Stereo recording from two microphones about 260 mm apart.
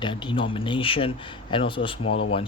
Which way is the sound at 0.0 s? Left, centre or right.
Centre.